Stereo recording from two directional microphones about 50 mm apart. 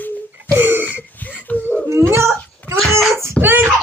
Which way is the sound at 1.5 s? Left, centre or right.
Left.